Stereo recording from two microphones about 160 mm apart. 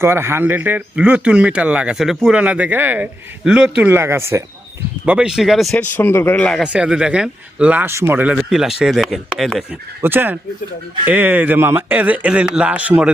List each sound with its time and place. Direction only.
0.0 s a man's voice: 15° right (ahead or behind)
5.0 s speech: 5° right (ahead or behind)
5.9 s speech: 15° left (ahead or behind)
6.6 s speech: 5° right (ahead or behind)
10.0 s a man's voice: 15° right (ahead or behind)